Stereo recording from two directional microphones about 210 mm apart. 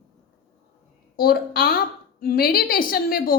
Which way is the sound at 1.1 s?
45° left (ahead or behind).